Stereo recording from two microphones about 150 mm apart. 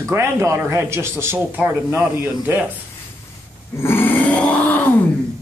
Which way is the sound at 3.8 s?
15° left (ahead or behind).